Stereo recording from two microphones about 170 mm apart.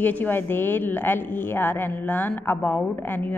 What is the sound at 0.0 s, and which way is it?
A woman's voice, 10° left (ahead or behind).